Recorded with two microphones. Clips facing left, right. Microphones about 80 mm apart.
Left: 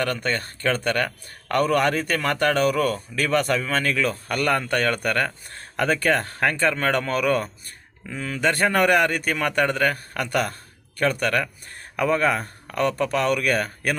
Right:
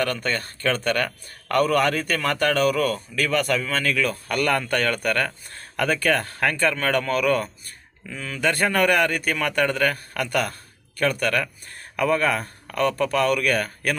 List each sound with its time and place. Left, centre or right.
0.0 s a man's voice: centre